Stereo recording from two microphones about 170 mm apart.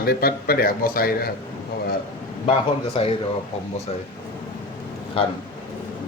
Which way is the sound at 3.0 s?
30° left (ahead or behind).